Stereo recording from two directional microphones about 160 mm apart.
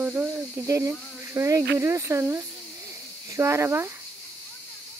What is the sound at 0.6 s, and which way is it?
Speech, 20° right (ahead or behind).